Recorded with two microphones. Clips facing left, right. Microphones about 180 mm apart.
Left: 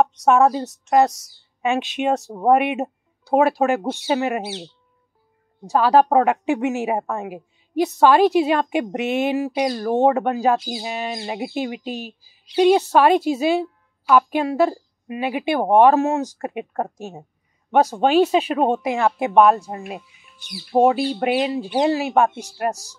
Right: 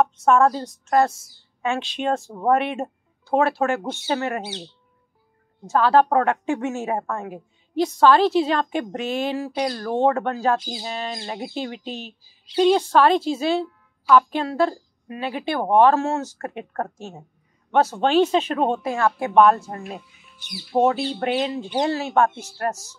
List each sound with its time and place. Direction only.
0.3 s a woman's voice: 5° left (ahead or behind)
0.8 s a woman's voice: 20° left (ahead or behind)
5.7 s a woman's voice: 10° left (ahead or behind)
19.3 s a woman's voice: 5° left (ahead or behind)